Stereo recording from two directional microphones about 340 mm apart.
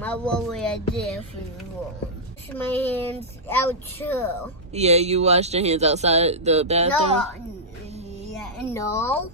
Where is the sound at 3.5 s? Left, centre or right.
Centre.